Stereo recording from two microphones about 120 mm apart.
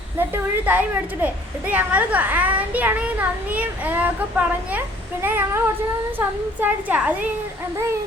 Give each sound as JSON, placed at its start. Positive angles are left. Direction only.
{"t": 0.2, "sound": "a child's voice", "side_deg": -15}